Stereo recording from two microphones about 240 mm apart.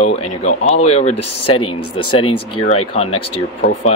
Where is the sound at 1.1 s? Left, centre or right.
Left.